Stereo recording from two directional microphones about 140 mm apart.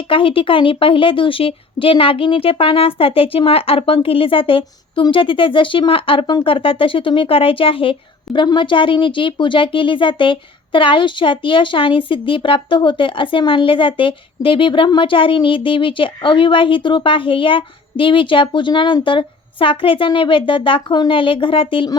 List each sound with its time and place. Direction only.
0.1 s a woman's voice: 40° left (ahead or behind)